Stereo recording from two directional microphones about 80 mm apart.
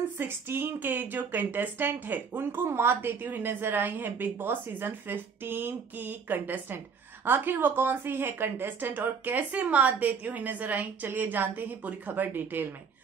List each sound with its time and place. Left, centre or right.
0.2 s speech: right